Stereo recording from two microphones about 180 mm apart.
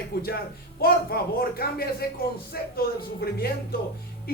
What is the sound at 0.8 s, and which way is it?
Speech, 55° left (ahead or behind).